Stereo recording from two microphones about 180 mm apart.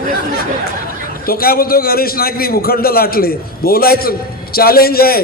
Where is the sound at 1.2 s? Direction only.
55° left (ahead or behind).